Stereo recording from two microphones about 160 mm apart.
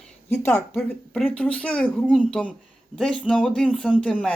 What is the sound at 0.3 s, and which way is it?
Speech, 15° left (ahead or behind).